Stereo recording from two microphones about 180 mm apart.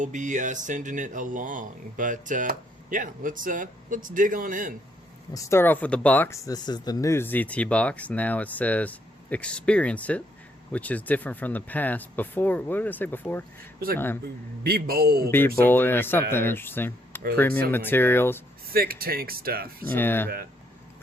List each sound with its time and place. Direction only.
0.0 s speech: 45° right (ahead or behind)
5.3 s speech: 15° left (ahead or behind)
13.7 s speech: 55° right (ahead or behind)
15.6 s speech: 10° left (ahead or behind)
18.7 s speech: 55° right (ahead or behind)
20.0 s speech: 10° left (ahead or behind)